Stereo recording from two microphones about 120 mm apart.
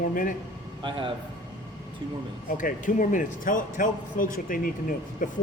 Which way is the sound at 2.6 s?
90° left.